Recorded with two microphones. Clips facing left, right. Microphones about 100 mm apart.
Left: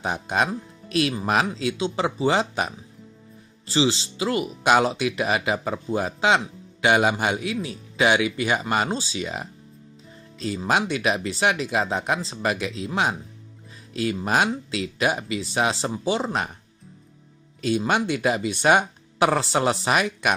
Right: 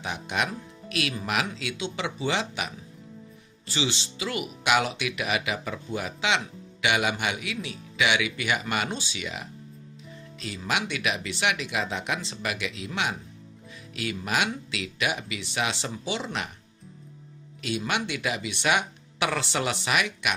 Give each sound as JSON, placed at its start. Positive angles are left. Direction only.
{"t": 0.0, "sound": "speech", "side_deg": 35}
{"t": 17.6, "sound": "speech", "side_deg": 35}